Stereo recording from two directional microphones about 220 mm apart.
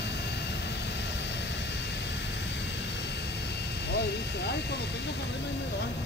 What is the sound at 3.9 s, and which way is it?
Vehicle, 50° left (ahead or behind).